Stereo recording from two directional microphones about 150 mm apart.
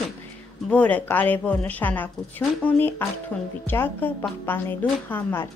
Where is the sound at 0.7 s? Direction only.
10° left (ahead or behind).